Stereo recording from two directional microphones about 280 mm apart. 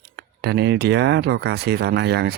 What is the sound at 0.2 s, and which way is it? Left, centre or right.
Speech, right.